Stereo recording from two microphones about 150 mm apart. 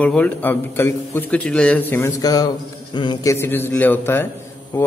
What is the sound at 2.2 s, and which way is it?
Speech, 25° left (ahead or behind).